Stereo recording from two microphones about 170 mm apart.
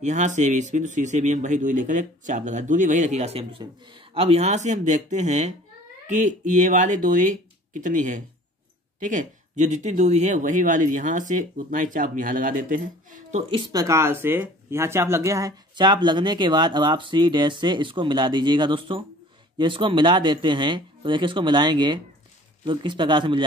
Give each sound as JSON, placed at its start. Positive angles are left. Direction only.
{"t": 0.0, "sound": "speech", "side_deg": -45}